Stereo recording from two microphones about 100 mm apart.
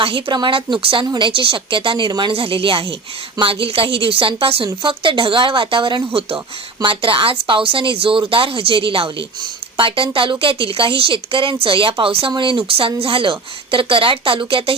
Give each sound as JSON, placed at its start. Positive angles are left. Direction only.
{"t": 0.0, "sound": "a woman's voice", "side_deg": -65}
{"t": 0.3, "sound": "a woman's voice", "side_deg": -55}
{"t": 2.3, "sound": "a woman's voice", "side_deg": -70}
{"t": 6.1, "sound": "a woman's voice", "side_deg": -65}